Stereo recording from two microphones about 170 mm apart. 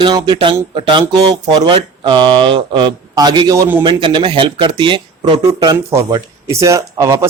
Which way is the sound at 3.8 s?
30° right (ahead or behind).